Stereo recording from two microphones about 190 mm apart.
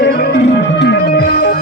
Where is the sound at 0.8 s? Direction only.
60° left (ahead or behind).